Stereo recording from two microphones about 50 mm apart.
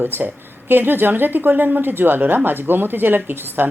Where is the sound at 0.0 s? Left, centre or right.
Right.